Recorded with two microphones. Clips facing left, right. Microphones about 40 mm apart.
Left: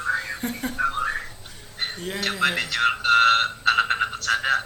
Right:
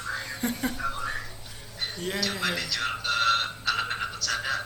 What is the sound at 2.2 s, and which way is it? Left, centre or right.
Frog, left.